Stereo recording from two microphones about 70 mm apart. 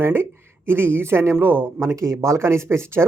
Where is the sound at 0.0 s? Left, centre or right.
Right.